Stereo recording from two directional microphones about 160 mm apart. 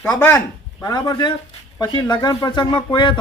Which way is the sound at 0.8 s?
25° left (ahead or behind).